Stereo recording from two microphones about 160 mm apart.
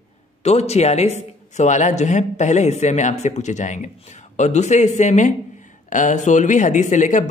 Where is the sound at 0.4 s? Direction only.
40° left (ahead or behind).